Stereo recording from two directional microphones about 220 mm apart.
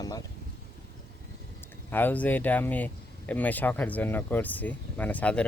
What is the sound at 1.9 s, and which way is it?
Speech, 10° left (ahead or behind).